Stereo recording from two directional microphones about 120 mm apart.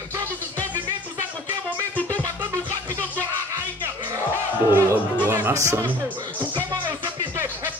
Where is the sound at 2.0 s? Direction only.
15° left (ahead or behind).